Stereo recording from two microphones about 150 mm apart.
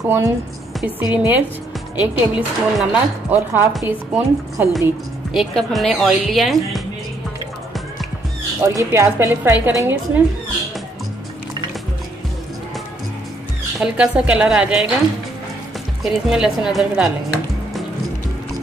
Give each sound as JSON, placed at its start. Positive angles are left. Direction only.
{"t": 0.0, "sound": "a woman's voice", "side_deg": -15}
{"t": 5.3, "sound": "a woman's voice", "side_deg": 0}
{"t": 8.6, "sound": "a woman's voice", "side_deg": -20}
{"t": 13.7, "sound": "a woman's voice", "side_deg": -5}
{"t": 16.0, "sound": "a woman's voice", "side_deg": -5}